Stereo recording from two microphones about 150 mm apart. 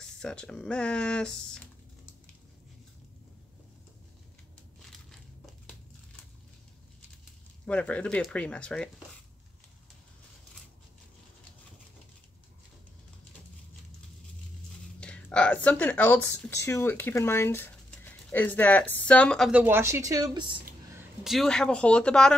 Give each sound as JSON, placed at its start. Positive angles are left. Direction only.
{"t": 0.0, "sound": "speech", "side_deg": 5}
{"t": 7.6, "sound": "speech", "side_deg": 10}
{"t": 15.0, "sound": "speech", "side_deg": 10}
{"t": 19.5, "sound": "a woman's voice", "side_deg": -15}
{"t": 21.2, "sound": "speech", "side_deg": 0}